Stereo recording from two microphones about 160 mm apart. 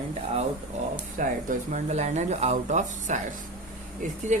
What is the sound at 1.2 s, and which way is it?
Speech, 50° right (ahead or behind).